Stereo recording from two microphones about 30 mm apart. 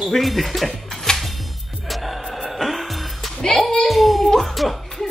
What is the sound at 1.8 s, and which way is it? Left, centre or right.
Music, centre.